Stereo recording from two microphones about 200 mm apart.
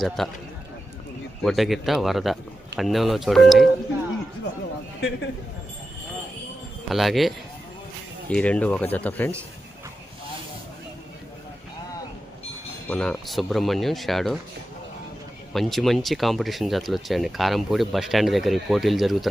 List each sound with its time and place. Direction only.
0.2 s speech: centre (ahead or behind)
1.4 s speech: centre (ahead or behind)
4.9 s a man's voice: 60° left (ahead or behind)
6.8 s speech: centre (ahead or behind)
12.9 s speech: 5° left (ahead or behind)
15.5 s speech: centre (ahead or behind)